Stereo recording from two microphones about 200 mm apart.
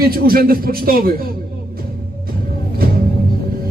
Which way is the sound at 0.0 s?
50° right (ahead or behind).